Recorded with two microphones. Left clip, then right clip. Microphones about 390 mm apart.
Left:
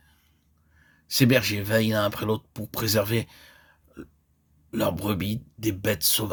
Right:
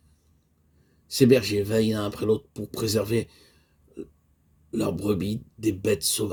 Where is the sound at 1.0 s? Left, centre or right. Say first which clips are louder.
Right 2 dB; left.